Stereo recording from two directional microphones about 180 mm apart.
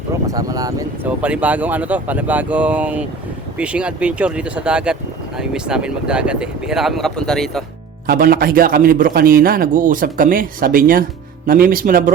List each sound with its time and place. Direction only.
0.3 s speech: 20° right (ahead or behind)
1.0 s speech: 5° right (ahead or behind)
8.0 s a man's voice: 55° right (ahead or behind)